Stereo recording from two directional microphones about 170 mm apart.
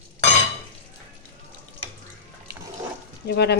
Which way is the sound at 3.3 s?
75° left (ahead or behind).